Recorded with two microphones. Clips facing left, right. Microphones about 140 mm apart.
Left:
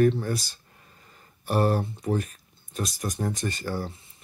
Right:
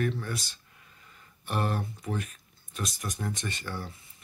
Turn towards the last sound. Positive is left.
turn(degrees=40)  # may be behind; listen again after turning